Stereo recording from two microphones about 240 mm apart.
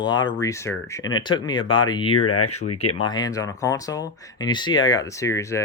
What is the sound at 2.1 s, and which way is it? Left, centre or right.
Speech, left.